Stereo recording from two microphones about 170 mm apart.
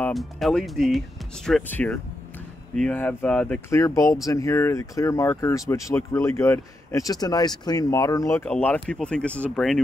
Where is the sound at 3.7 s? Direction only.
20° left (ahead or behind).